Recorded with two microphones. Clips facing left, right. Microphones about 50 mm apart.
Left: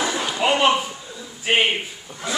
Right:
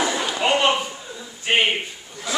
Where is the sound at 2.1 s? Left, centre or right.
Left.